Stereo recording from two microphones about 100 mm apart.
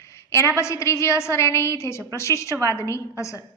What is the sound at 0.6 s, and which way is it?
A woman's voice, 30° left (ahead or behind).